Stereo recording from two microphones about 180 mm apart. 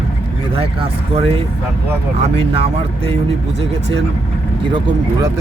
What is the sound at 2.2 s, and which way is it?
Speech, 35° right (ahead or behind).